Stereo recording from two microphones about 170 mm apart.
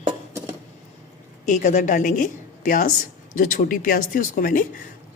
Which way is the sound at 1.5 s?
45° left (ahead or behind).